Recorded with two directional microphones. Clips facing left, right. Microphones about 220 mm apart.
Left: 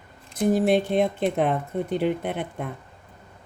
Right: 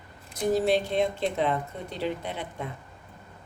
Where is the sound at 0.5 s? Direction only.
55° left (ahead or behind).